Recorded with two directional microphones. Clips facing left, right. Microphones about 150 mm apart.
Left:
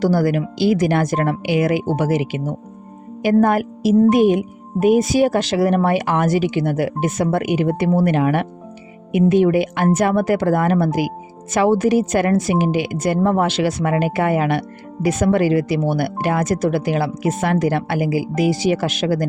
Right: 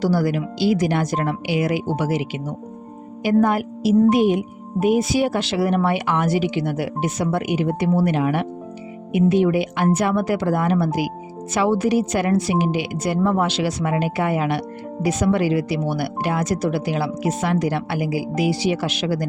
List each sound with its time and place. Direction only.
0.0 s speech: 50° left (ahead or behind)